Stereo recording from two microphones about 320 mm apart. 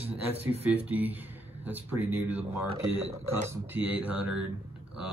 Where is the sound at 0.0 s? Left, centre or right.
Centre.